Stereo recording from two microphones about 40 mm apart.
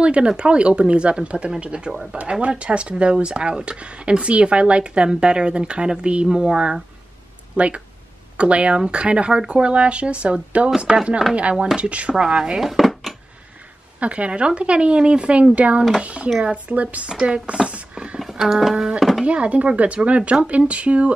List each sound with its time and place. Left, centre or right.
0.0 s speech: right
7.5 s speech: right
10.9 s speech: centre
11.5 s speech: centre
12.5 s dishes: centre
13.9 s speech: right
17.1 s speech: right
18.2 s a sound: centre
19.2 s speech: right